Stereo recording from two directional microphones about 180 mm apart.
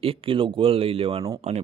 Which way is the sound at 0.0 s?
30° right (ahead or behind).